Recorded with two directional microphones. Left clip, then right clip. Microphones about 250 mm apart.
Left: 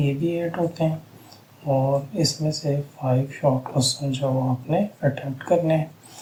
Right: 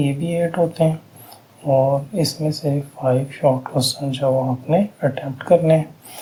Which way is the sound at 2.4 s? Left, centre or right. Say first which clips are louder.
Right 3 dB; right.